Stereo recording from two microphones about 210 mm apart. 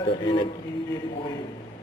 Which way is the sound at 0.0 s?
20° left (ahead or behind).